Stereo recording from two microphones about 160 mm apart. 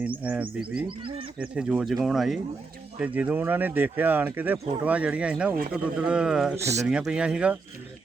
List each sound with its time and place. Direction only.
0.2 s speech: 10° right (ahead or behind)
0.9 s speech: 30° right (ahead or behind)
1.4 s speech: 5° right (ahead or behind)
6.6 s speech: 20° right (ahead or behind)
6.9 s speech: 5° right (ahead or behind)